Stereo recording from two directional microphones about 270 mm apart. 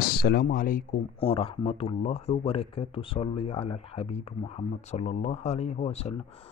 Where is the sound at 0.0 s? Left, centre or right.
Left.